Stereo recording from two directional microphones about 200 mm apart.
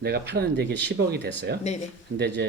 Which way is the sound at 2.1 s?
60° right (ahead or behind).